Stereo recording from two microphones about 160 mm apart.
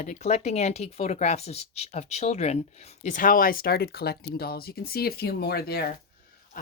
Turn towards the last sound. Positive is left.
turn(degrees=75)  # may be behind; listen again after turning